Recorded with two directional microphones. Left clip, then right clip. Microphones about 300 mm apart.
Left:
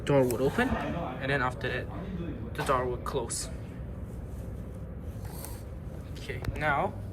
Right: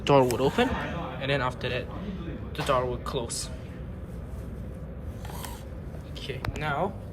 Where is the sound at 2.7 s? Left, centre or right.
Centre.